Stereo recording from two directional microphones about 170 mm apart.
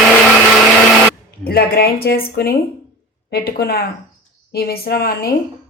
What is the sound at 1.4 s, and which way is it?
A woman's voice, 65° left (ahead or behind).